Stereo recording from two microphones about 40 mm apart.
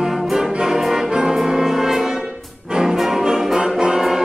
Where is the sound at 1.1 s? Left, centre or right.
Centre.